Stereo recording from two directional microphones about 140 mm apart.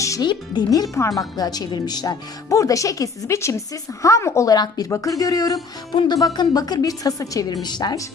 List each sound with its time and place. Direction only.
0.0 s music: 25° left (ahead or behind)
0.3 s speech: 30° left (ahead or behind)